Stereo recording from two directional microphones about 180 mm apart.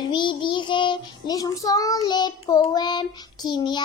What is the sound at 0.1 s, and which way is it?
Child singing, 25° left (ahead or behind).